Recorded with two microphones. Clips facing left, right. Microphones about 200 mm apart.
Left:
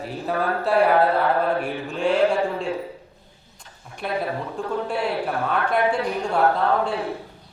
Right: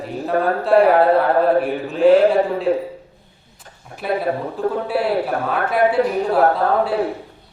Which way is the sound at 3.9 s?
50° right (ahead or behind).